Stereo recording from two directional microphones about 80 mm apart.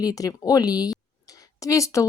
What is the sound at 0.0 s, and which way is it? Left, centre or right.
Speech, left.